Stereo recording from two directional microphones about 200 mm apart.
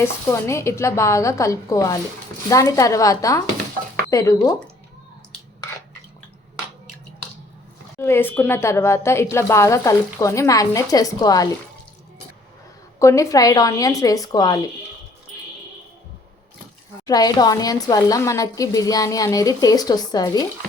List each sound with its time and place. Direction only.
0.0 s a woman's voice: 15° left (ahead or behind)
7.9 s a woman's voice: 10° left (ahead or behind)
13.0 s a woman's voice: 15° left (ahead or behind)
17.1 s a woman's voice: 20° left (ahead or behind)